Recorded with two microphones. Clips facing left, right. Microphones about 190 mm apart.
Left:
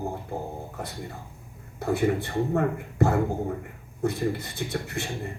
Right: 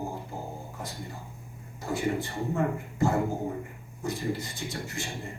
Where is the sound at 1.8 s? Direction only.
60° left (ahead or behind).